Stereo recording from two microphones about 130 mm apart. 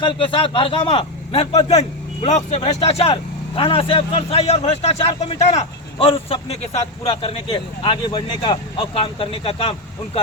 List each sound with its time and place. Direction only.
0.0 s speech: 40° left (ahead or behind)
1.6 s speech: 60° left (ahead or behind)
7.0 s speech: 40° left (ahead or behind)